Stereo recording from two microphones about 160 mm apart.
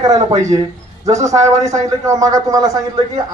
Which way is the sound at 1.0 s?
20° right (ahead or behind).